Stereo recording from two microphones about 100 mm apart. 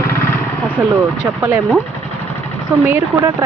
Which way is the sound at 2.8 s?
25° right (ahead or behind).